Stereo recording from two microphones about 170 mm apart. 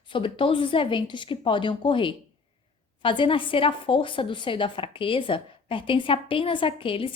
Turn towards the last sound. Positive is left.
turn(degrees=30)  # may be behind; listen again after turning